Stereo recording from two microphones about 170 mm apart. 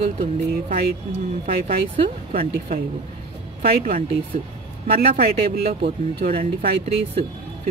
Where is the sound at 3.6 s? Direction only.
60° right (ahead or behind).